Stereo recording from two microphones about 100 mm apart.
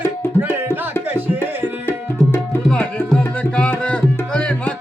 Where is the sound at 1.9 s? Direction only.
25° left (ahead or behind).